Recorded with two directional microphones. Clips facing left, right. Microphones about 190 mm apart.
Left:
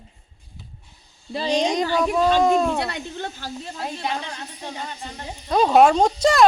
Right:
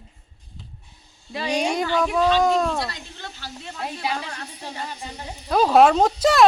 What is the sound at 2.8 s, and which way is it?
Speech, 55° left (ahead or behind).